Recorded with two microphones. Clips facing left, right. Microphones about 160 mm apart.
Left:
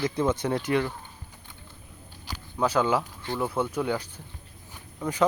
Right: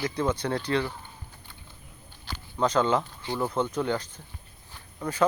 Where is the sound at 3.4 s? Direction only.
10° left (ahead or behind).